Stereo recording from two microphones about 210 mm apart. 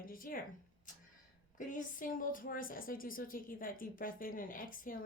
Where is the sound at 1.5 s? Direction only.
40° left (ahead or behind).